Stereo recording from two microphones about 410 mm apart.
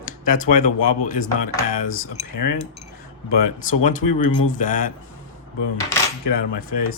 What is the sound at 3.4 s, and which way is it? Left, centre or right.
Speech, centre.